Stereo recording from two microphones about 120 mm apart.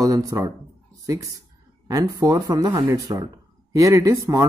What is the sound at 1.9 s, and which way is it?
Speech, 30° right (ahead or behind).